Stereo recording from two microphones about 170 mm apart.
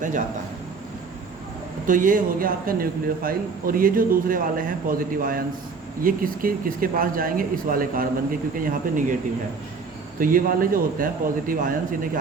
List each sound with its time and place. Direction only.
1.9 s a man's voice: 50° right (ahead or behind)
10.2 s a man's voice: 55° right (ahead or behind)